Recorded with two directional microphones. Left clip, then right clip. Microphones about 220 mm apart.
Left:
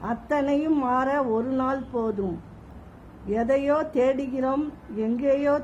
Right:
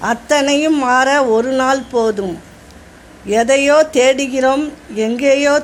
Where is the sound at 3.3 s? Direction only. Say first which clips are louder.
Right 12 dB; 15° right (ahead or behind).